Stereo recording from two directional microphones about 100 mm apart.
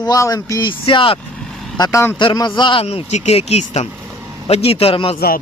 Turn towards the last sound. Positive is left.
turn(degrees=70)  # may be behind; listen again after turning